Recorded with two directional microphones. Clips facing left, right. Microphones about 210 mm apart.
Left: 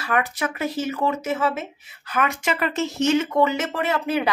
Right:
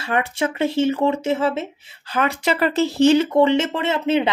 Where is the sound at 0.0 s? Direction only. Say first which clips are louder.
Right 3 dB; 25° right (ahead or behind).